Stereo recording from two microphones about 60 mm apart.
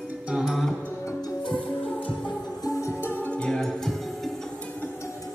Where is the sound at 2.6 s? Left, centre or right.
Left.